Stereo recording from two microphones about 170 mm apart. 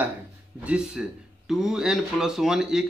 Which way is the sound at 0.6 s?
5° right (ahead or behind).